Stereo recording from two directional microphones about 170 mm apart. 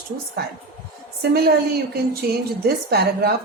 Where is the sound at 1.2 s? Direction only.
70° right (ahead or behind).